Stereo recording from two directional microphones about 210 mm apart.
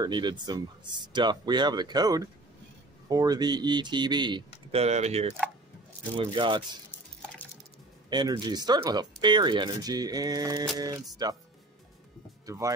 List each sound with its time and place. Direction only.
0.0 s speech: 20° right (ahead or behind)
8.1 s speech: 20° right (ahead or behind)
12.4 s speech: 15° right (ahead or behind)